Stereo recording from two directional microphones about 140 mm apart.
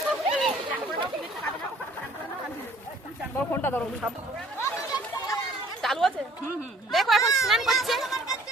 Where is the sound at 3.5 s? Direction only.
15° left (ahead or behind).